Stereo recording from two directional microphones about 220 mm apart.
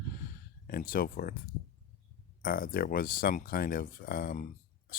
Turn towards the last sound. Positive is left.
turn(degrees=40)  # may be behind; listen again after turning